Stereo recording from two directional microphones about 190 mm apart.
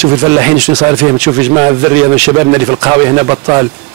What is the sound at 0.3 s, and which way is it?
A man's voice, 10° right (ahead or behind).